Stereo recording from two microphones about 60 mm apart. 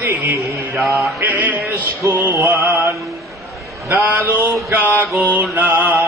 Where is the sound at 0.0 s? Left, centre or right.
Right.